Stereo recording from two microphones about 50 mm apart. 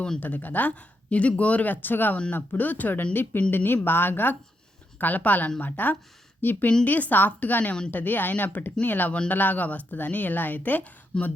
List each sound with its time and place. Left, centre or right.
0.2 s a woman's voice: left
11.1 s speech: centre